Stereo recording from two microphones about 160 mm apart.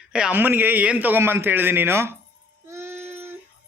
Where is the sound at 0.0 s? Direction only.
5° right (ahead or behind).